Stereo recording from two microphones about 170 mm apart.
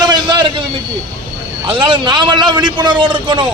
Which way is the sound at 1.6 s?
30° right (ahead or behind).